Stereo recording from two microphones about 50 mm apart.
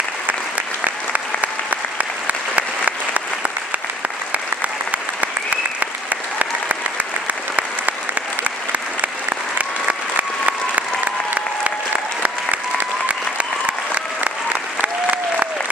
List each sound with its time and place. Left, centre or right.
0.3 s applause: right
5.2 s applause: right
7.5 s applause: right
9.6 s applause: right
12.2 s applause: right